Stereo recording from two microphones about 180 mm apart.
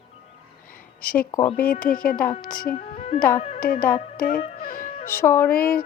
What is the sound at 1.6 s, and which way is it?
Music, 50° left (ahead or behind).